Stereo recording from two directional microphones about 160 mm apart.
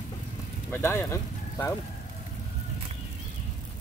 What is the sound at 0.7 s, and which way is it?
Speech, 15° left (ahead or behind).